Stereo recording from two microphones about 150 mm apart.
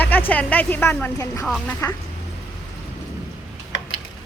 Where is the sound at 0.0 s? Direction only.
10° left (ahead or behind).